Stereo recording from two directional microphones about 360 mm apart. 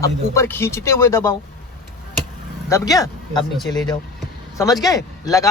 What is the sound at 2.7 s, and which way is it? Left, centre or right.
Speech, centre.